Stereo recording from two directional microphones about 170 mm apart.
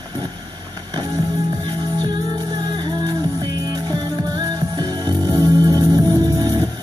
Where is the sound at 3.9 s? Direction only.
25° right (ahead or behind).